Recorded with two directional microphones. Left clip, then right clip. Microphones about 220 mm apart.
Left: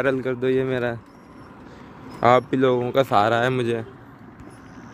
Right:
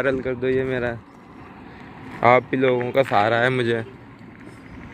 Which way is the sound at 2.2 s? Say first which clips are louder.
Right 1 dB; 15° left (ahead or behind).